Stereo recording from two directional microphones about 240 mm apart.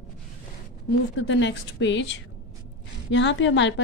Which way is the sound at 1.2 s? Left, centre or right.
Left.